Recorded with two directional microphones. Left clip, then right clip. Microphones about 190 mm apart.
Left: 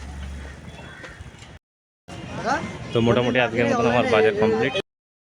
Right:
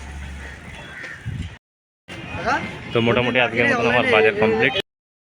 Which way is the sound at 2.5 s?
35° left (ahead or behind).